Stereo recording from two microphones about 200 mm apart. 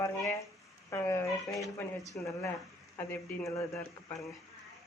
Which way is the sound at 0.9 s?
15° left (ahead or behind).